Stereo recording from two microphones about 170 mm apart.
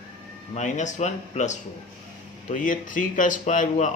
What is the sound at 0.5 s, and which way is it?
Speech, 45° left (ahead or behind).